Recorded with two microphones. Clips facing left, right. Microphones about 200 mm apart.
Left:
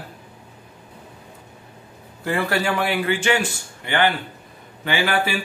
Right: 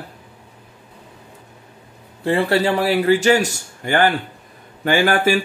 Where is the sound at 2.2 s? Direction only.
30° right (ahead or behind); by 5.3 s 45° right (ahead or behind).